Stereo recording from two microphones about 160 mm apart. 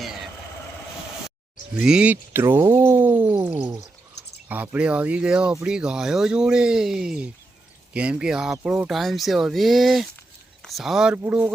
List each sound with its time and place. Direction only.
0.0 s vehicle: centre (ahead or behind)
1.7 s speech: 5° right (ahead or behind)
3.6 s speech: 20° right (ahead or behind)